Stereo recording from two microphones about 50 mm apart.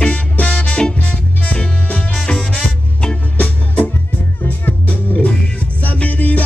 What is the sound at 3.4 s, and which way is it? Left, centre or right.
Music, left.